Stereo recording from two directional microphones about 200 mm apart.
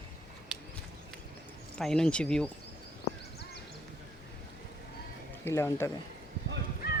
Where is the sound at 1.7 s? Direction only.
5° left (ahead or behind).